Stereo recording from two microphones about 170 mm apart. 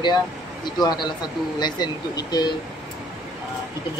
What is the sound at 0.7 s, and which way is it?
Speech, 25° left (ahead or behind).